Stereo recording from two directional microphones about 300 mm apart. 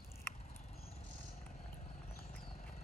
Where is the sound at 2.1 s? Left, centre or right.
Left.